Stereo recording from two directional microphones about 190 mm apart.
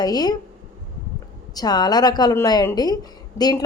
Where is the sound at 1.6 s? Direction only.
20° left (ahead or behind).